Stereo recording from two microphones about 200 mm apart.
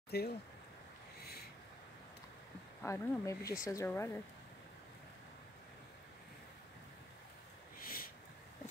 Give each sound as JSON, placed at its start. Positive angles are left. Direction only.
{"t": 0.1, "sound": "speech", "side_deg": 55}
{"t": 2.8, "sound": "speech", "side_deg": 15}
{"t": 7.8, "sound": "a sound", "side_deg": 45}